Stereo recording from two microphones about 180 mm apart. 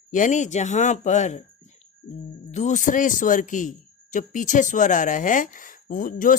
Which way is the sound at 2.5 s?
40° left (ahead or behind).